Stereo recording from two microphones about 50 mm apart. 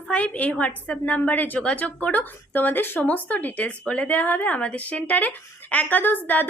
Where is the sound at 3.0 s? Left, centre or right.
Left.